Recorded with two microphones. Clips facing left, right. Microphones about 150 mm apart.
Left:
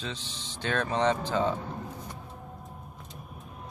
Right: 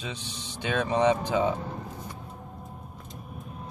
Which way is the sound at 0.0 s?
15° right (ahead or behind).